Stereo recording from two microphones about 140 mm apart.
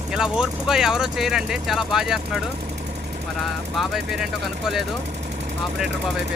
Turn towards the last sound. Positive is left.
turn(degrees=0)  # may be behind; listen again after turning